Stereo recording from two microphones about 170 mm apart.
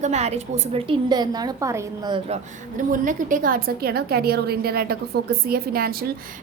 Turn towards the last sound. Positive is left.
turn(degrees=-60)  # may be behind; listen again after turning